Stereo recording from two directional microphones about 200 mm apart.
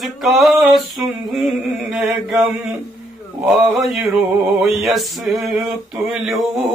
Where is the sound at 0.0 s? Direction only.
Centre (ahead or behind).